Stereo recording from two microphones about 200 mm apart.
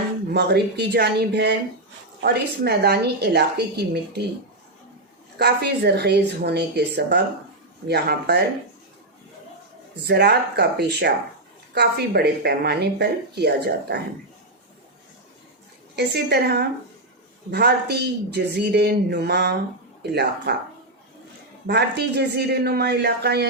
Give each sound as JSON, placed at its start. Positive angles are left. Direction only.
{"t": 0.3, "sound": "speech", "side_deg": -55}
{"t": 5.4, "sound": "speech", "side_deg": -55}
{"t": 10.1, "sound": "speech", "side_deg": -55}
{"t": 16.0, "sound": "speech", "side_deg": -55}
{"t": 21.7, "sound": "speech", "side_deg": -55}